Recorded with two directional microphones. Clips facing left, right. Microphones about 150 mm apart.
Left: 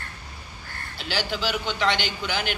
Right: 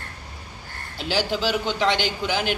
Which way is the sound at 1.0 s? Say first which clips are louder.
Right 4 dB; 40° right (ahead or behind).